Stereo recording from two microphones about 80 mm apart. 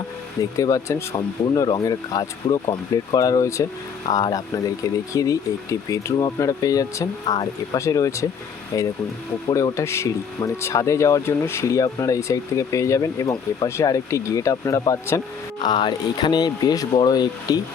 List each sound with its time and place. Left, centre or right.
0.5 s speech: left
1.1 s speech: left
3.2 s speech: left
9.7 s speech: left
15.5 s speech: left